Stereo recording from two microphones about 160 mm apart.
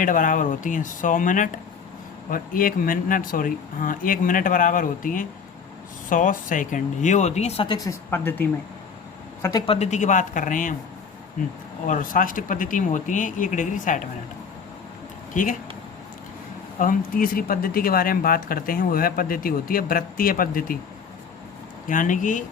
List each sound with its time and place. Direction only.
0.0 s speech: 55° left (ahead or behind); by 7.8 s 35° left (ahead or behind)
7.8 s speech: 15° left (ahead or behind)
9.4 s speech: 25° left (ahead or behind)
9.7 s speech: 45° left (ahead or behind)
11.9 s speech: 55° left (ahead or behind)
15.3 s speech: 60° left (ahead or behind)
16.7 s speech: 60° left (ahead or behind)
21.8 s speech: 55° left (ahead or behind)